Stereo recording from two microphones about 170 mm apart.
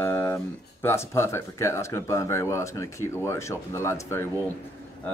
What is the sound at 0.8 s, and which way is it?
Speech, 15° left (ahead or behind).